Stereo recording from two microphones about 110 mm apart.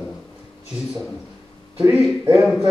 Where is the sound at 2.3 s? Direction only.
Centre (ahead or behind).